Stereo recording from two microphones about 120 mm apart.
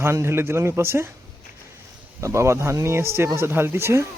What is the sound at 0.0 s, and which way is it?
Speech, 20° right (ahead or behind).